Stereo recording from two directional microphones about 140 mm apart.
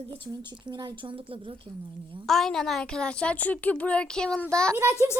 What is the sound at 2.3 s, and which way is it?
A woman's voice, 5° left (ahead or behind).